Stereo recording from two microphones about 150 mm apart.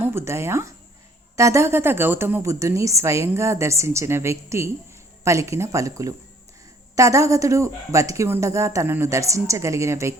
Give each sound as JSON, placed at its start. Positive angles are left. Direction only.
{"t": 0.0, "sound": "a woman's voice", "side_deg": -15}